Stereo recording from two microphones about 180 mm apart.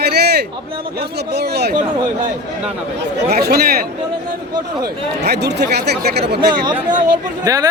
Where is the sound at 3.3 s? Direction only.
60° right (ahead or behind).